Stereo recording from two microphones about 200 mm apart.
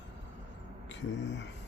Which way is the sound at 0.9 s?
65° left (ahead or behind).